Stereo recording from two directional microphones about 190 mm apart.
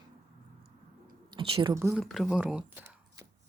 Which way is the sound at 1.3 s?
25° right (ahead or behind).